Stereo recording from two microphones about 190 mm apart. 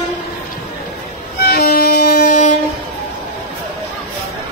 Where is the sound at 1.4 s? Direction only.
55° left (ahead or behind).